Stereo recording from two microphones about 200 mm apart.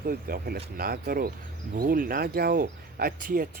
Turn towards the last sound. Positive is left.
turn(degrees=-45)  # may be behind; listen again after turning